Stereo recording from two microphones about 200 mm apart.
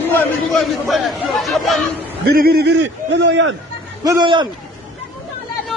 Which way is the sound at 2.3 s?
50° right (ahead or behind).